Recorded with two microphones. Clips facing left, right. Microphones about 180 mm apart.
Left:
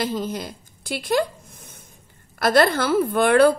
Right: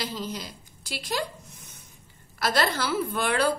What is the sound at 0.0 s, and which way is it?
Speech, 50° left (ahead or behind).